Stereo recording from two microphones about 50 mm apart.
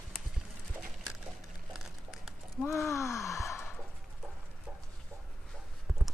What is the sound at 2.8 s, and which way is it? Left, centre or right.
Gasp, left.